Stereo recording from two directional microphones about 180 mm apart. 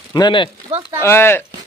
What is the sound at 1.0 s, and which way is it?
Speech, 15° left (ahead or behind).